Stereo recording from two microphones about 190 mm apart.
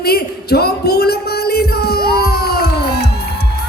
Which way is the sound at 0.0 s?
55° left (ahead or behind).